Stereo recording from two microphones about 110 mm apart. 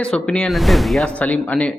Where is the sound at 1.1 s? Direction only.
10° left (ahead or behind).